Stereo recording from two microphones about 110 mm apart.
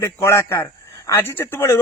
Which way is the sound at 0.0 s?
25° left (ahead or behind).